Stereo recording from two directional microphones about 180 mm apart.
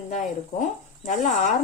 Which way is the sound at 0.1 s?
45° left (ahead or behind).